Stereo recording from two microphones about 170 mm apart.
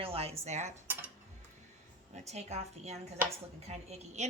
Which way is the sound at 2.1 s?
40° right (ahead or behind).